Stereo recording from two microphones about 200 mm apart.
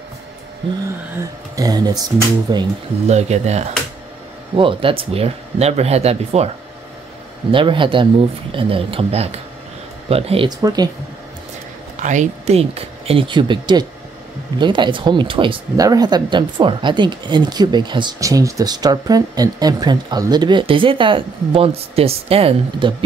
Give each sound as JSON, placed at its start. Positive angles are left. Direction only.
{"t": 1.6, "sound": "speech", "side_deg": -20}
{"t": 3.1, "sound": "speech", "side_deg": -35}
{"t": 7.5, "sound": "speech", "side_deg": -25}
{"t": 12.0, "sound": "speech", "side_deg": -35}